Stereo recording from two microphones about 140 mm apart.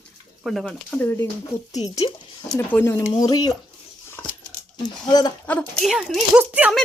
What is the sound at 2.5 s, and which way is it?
Speech, 15° left (ahead or behind).